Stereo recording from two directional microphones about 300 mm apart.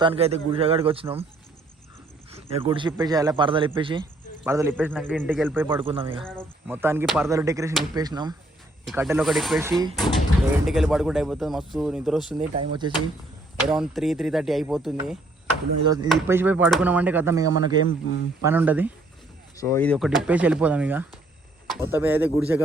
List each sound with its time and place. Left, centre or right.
0.0 s a man's voice: centre
2.3 s a man's voice: centre
5.6 s a man's voice: centre
6.4 s a man's voice: centre
7.3 s a man's voice: centre
12.4 s a man's voice: centre
13.7 s speech: centre
17.8 s speech: left
18.4 s speech: centre
19.5 s a man's voice: centre